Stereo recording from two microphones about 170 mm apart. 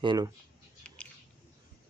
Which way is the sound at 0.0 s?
25° right (ahead or behind).